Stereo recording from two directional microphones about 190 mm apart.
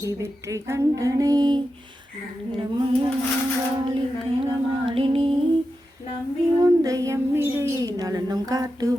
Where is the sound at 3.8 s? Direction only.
25° right (ahead or behind).